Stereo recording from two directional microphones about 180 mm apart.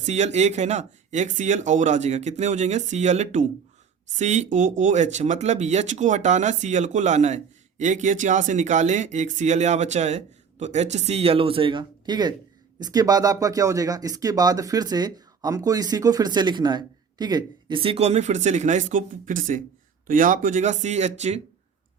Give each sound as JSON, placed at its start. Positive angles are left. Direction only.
{"t": 0.0, "sound": "speech", "side_deg": -40}